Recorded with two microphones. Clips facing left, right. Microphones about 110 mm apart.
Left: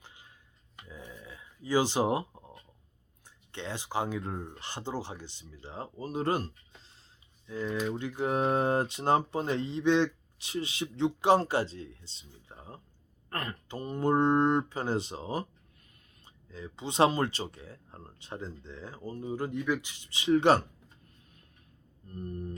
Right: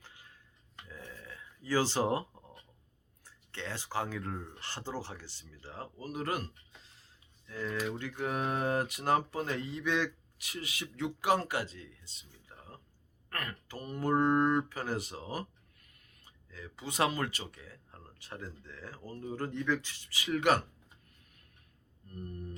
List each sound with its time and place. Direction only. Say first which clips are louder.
0.0 s a sound: left 1 dB; 20° left (ahead or behind)
3.2 s speech: left 3 dB; 20° left (ahead or behind)
7.4 s speech: left 4 dB; 15° left (ahead or behind)
13.3 s a sound: left 4 dB; 25° left (ahead or behind)
14.7 s speech: left 5 dB; 25° left (ahead or behind)
22.1 s speech: left 5 dB; 30° left (ahead or behind)